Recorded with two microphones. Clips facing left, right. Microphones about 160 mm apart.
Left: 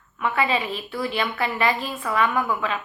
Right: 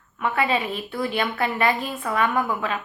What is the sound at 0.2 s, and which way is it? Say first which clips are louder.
A woman's voice: even; 45° right (ahead or behind).